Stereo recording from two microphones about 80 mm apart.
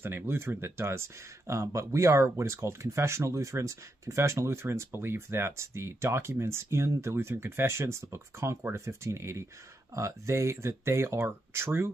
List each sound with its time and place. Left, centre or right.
0.0 s speech: right